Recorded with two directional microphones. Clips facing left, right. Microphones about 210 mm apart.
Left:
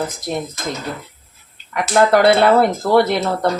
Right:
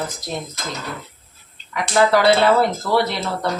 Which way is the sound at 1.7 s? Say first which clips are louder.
Left 2 dB; 55° left (ahead or behind).